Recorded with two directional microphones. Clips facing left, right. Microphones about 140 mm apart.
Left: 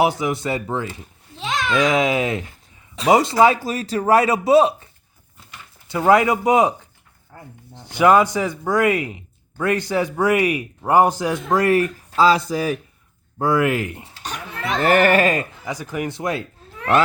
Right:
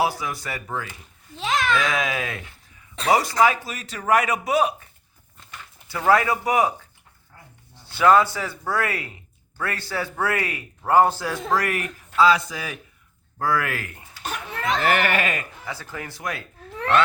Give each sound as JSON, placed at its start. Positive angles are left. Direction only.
{"t": 0.0, "sound": "speech", "side_deg": 20}
{"t": 1.4, "sound": "babbling", "side_deg": 0}
{"t": 1.7, "sound": "speech", "side_deg": 25}
{"t": 13.4, "sound": "speech", "side_deg": 20}
{"t": 14.6, "sound": "speech", "side_deg": 35}
{"t": 15.6, "sound": "speech", "side_deg": 15}